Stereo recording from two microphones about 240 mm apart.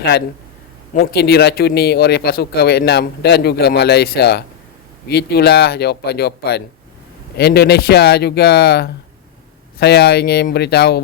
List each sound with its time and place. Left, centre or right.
0.9 s speech: left